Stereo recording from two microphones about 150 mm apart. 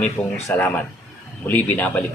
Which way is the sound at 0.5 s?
15° left (ahead or behind).